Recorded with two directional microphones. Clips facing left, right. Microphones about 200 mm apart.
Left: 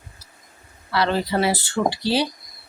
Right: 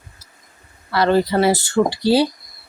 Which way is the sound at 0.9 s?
50° right (ahead or behind).